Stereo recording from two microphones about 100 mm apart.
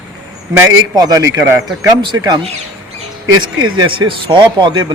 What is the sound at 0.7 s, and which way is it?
A man's voice, 40° right (ahead or behind).